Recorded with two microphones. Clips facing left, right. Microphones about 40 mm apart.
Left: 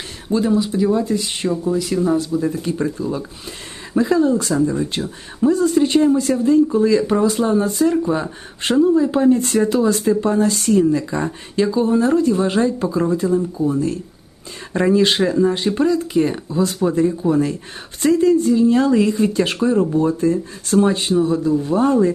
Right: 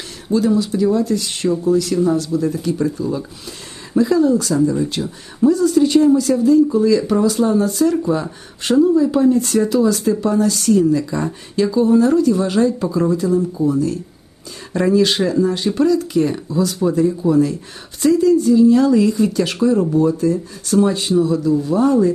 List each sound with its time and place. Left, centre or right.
0.3 s speech: left
6.3 s speech: centre
6.7 s speech: left
7.9 s speech: centre
8.6 s speech: left
17.3 s speech: left